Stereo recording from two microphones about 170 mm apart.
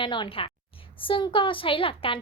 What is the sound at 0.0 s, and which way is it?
A woman's voice, 30° left (ahead or behind).